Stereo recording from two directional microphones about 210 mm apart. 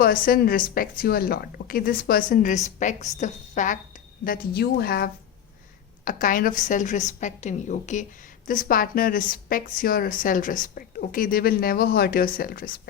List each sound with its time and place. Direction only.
0.0 s a woman's voice: 45° left (ahead or behind)